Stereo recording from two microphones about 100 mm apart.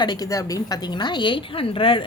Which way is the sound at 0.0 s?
40° left (ahead or behind).